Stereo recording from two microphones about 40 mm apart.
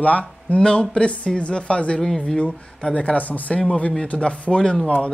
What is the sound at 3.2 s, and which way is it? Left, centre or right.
Speech, left.